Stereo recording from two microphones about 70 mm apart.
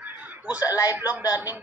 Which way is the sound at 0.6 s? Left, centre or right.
Left.